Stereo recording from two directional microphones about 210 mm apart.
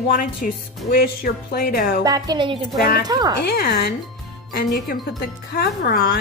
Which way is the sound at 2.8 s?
45° left (ahead or behind).